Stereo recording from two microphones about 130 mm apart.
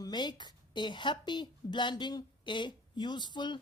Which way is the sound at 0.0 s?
35° left (ahead or behind).